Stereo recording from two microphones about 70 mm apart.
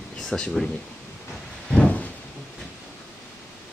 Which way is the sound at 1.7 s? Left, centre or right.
Centre.